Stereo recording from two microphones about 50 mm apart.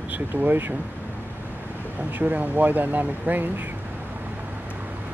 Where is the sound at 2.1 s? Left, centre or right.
Right.